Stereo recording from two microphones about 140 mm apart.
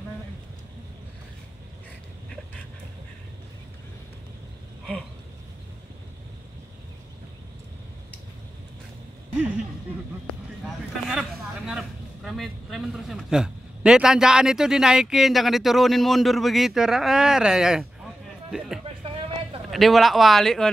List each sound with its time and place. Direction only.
11.1 s a man's voice: 5° right (ahead or behind)
19.1 s a sound: 40° right (ahead or behind)
19.7 s speech: centre (ahead or behind)